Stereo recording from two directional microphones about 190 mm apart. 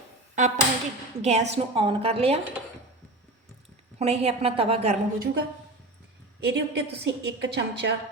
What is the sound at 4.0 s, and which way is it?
Speech, 35° right (ahead or behind).